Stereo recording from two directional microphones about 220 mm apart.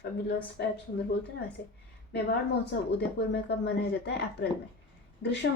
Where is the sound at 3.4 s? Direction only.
50° left (ahead or behind).